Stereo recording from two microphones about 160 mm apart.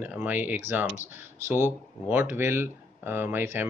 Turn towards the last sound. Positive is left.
turn(degrees=-15)  # may be behind; listen again after turning